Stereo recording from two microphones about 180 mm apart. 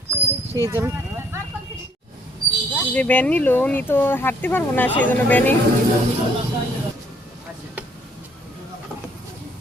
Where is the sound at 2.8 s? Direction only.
10° left (ahead or behind).